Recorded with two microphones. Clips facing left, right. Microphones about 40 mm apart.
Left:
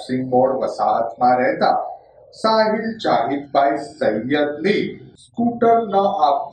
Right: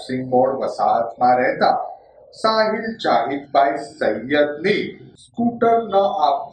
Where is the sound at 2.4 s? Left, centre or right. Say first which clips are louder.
Left 1 dB; centre.